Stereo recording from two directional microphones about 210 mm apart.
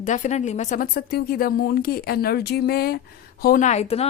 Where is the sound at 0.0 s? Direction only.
35° left (ahead or behind).